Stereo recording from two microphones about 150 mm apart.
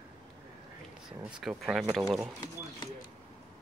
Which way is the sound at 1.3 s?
5° right (ahead or behind).